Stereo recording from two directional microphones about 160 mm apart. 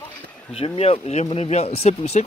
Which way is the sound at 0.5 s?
35° left (ahead or behind).